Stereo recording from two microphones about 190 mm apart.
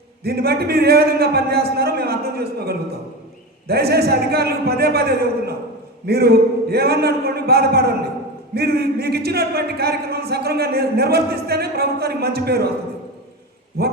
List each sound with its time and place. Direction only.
0.3 s speech: 55° right (ahead or behind)
13.8 s speech: 55° right (ahead or behind)